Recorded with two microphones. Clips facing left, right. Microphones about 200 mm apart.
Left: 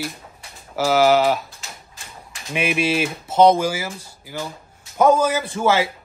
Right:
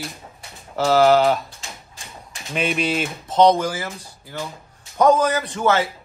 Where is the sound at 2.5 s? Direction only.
5° left (ahead or behind).